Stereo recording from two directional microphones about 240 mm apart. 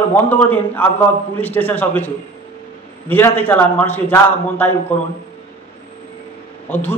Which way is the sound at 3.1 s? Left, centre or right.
Centre.